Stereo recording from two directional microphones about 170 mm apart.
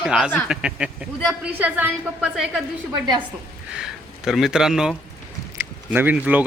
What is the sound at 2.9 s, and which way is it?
Speech, 25° right (ahead or behind).